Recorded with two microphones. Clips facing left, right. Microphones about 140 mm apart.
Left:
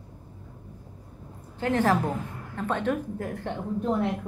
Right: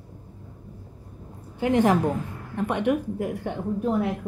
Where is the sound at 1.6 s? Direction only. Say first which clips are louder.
Right 3 dB; 15° right (ahead or behind).